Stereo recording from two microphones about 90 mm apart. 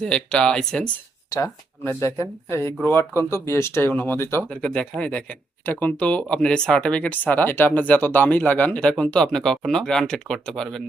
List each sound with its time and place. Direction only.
0.0 s speech: 10° left (ahead or behind)
1.3 s speech: 45° left (ahead or behind)
1.8 s speech: 30° left (ahead or behind)
4.4 s speech: 10° left (ahead or behind)